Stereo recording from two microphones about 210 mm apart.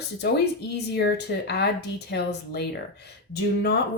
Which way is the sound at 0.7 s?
50° left (ahead or behind).